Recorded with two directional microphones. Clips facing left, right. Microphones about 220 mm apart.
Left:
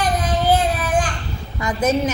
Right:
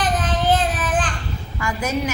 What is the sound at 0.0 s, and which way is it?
Child singing, 10° left (ahead or behind).